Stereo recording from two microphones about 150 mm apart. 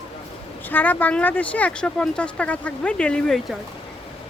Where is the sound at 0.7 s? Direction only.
10° left (ahead or behind).